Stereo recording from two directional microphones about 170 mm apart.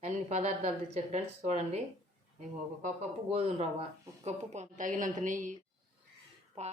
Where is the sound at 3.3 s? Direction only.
35° right (ahead or behind).